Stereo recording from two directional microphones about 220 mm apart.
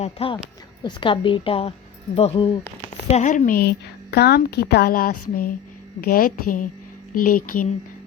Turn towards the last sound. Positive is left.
turn(degrees=40)  # may be behind; listen again after turning